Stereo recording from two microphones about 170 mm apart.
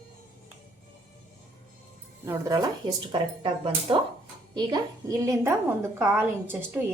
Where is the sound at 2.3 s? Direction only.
25° right (ahead or behind).